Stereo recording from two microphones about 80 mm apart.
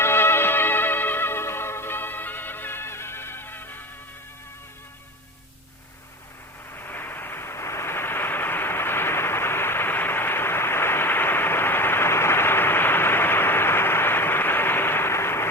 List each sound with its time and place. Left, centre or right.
0.0 s music: left
6.7 s vehicle: left